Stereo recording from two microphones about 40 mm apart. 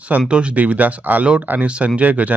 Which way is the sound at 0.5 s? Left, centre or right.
Right.